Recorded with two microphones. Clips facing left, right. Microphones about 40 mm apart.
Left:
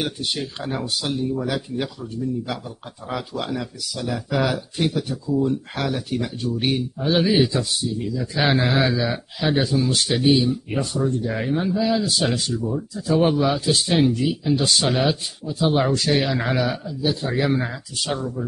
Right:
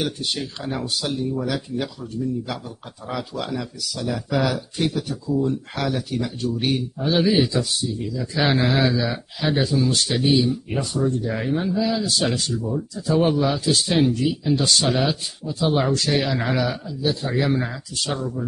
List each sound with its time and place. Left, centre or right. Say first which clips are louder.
0.0 s speech: even; centre
6.1 s speech: even; centre